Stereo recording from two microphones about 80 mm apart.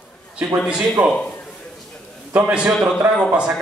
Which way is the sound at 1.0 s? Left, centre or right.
Right.